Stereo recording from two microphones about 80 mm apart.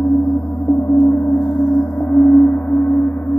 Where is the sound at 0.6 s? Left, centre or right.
Left.